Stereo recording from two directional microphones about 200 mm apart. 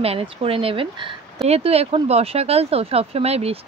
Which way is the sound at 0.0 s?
30° right (ahead or behind).